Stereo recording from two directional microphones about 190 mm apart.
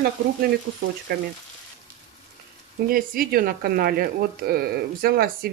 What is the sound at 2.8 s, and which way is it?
Speech, 50° right (ahead or behind).